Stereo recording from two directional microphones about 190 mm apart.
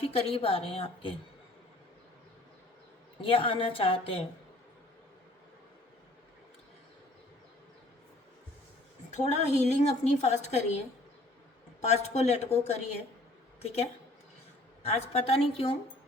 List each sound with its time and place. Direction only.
0.0 s a woman's voice: 30° left (ahead or behind)
3.2 s a woman's voice: 30° left (ahead or behind)
9.0 s a woman's voice: 35° left (ahead or behind)
11.8 s a woman's voice: 35° left (ahead or behind)
14.8 s a woman's voice: 35° left (ahead or behind)